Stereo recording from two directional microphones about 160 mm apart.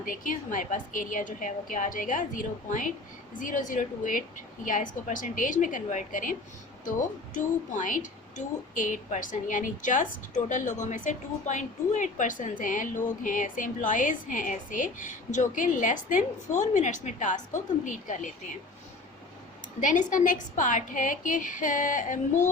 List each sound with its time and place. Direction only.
0.0 s a woman's voice: 55° left (ahead or behind)
19.8 s a woman's voice: 50° left (ahead or behind)